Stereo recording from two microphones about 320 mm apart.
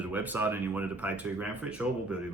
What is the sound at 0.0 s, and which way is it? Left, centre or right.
A man's voice, centre.